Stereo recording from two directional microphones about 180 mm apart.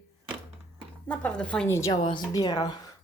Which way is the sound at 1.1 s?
5° left (ahead or behind).